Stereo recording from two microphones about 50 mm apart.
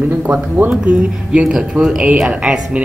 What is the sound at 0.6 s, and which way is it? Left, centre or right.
Speech, right.